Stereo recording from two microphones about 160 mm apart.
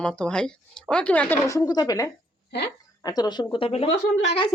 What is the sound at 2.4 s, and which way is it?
Speech, 90° left.